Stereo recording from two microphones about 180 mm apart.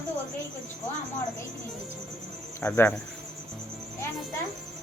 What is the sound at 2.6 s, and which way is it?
Speech, 10° left (ahead or behind).